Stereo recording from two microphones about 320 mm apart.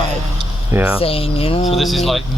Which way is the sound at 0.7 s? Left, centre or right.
Centre.